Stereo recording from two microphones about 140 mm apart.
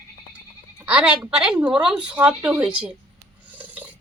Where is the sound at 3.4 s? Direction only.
10° right (ahead or behind).